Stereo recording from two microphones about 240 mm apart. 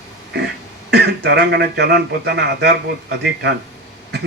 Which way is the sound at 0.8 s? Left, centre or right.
Right.